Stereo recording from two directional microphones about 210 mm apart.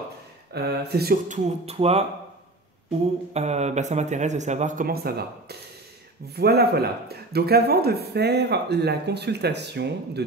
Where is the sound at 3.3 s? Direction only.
30° right (ahead or behind).